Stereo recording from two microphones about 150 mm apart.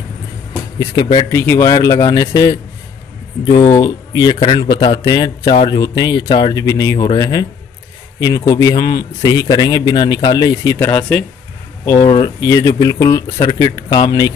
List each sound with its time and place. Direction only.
1.3 s a man's voice: 20° left (ahead or behind)